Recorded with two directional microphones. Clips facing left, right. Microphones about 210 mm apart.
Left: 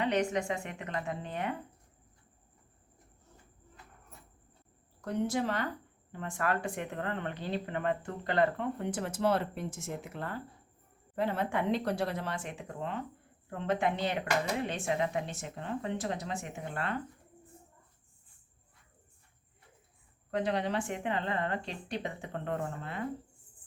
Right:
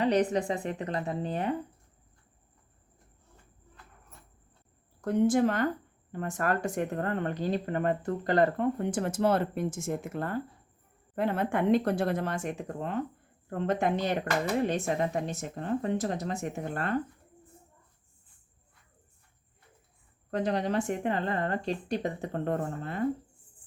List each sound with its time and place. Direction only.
0.0 s a woman's voice: 35° right (ahead or behind)
4.9 s speech: 50° right (ahead or behind)
20.3 s speech: 45° right (ahead or behind)